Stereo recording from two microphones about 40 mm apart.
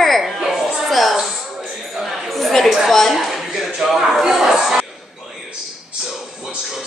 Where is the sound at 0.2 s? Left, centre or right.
Centre.